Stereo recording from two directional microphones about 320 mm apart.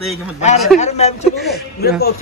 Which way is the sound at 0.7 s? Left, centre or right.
Left.